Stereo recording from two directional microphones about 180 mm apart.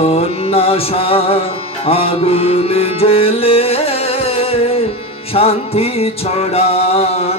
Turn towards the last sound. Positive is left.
turn(degrees=35)  # may be behind; listen again after turning